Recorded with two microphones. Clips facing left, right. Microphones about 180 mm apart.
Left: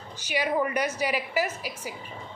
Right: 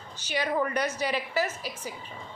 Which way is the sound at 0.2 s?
10° left (ahead or behind).